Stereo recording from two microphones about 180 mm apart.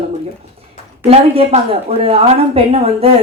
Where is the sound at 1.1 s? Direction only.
35° right (ahead or behind).